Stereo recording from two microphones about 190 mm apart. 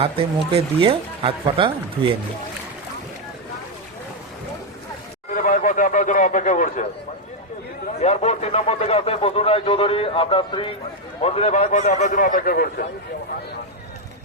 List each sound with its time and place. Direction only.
0.0 s speech: 30° right (ahead or behind)
5.3 s a sound: 45° left (ahead or behind)
7.9 s speech: 35° left (ahead or behind); by 12.9 s 55° left (ahead or behind)